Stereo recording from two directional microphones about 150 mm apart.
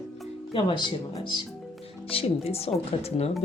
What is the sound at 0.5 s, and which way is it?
Speech, 30° left (ahead or behind).